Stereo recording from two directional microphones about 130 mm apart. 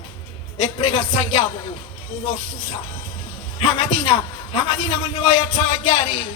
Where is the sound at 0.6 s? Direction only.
40° left (ahead or behind).